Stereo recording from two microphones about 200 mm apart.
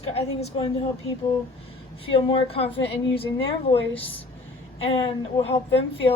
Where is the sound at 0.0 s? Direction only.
30° left (ahead or behind).